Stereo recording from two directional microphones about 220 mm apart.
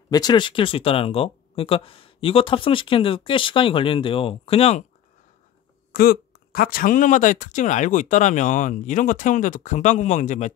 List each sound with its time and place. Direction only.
0.1 s speech: 20° left (ahead or behind)
5.9 s speech: 40° left (ahead or behind)